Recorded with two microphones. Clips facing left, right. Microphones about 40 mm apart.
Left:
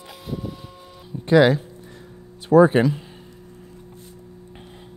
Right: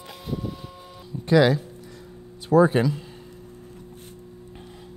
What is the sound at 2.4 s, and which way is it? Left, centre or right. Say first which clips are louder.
Speech: left 4 dB; left.